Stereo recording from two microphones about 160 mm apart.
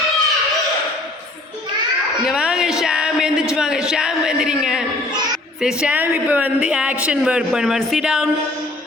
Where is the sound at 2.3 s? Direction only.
5° right (ahead or behind).